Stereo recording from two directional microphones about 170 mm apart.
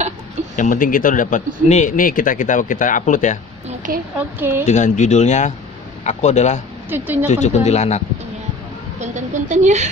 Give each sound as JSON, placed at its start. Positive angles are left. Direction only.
{"t": 0.6, "sound": "a man's voice", "side_deg": 50}
{"t": 3.6, "sound": "a sound", "side_deg": -50}
{"t": 4.2, "sound": "a woman's voice", "side_deg": -10}
{"t": 4.6, "sound": "a man's voice", "side_deg": 45}
{"t": 6.9, "sound": "a woman's voice", "side_deg": -10}
{"t": 7.2, "sound": "speech", "side_deg": 40}
{"t": 9.0, "sound": "a woman's voice", "side_deg": -45}